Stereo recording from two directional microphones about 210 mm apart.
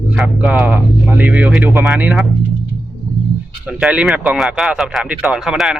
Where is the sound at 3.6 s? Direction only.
5° right (ahead or behind).